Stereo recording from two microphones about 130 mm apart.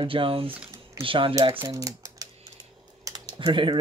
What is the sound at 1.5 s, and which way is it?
Speech, 25° right (ahead or behind).